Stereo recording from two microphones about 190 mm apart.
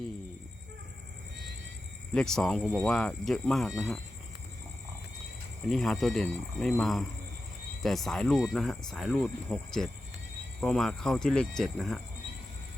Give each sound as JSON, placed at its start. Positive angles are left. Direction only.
{"t": 2.1, "sound": "speech", "side_deg": 5}
{"t": 5.6, "sound": "speech", "side_deg": 0}